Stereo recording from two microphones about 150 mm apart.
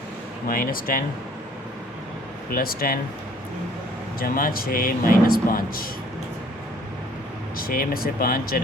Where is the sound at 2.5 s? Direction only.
75° left (ahead or behind).